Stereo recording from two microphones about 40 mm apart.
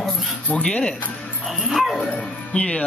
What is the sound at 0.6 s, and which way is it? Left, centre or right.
Speech, left.